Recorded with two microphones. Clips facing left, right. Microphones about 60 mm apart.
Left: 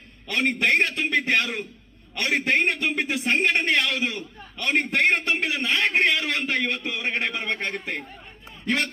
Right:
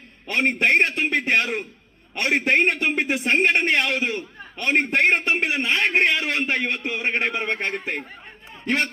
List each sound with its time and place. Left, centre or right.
0.3 s a man's voice: right